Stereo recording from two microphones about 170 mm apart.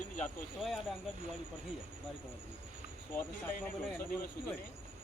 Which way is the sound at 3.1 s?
10° left (ahead or behind).